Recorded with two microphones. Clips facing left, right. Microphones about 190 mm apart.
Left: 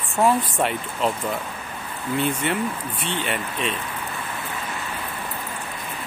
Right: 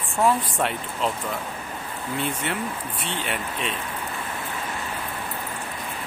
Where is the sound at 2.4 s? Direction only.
Centre (ahead or behind).